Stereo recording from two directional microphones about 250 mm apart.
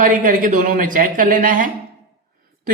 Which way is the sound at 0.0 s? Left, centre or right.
Right.